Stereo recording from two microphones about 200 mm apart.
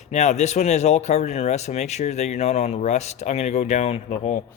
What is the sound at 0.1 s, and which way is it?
Speech, 35° left (ahead or behind).